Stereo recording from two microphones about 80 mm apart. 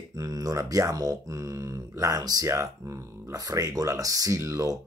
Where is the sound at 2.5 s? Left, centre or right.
Right.